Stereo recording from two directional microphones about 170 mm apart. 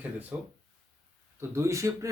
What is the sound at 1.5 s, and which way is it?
Speech, 15° right (ahead or behind).